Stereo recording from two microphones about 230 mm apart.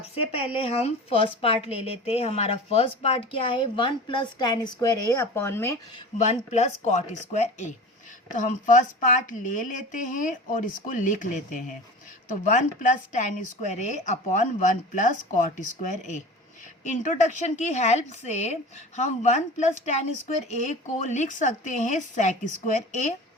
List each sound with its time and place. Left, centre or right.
0.9 s a woman's voice: left
6.1 s a woman's voice: left
16.8 s a woman's voice: left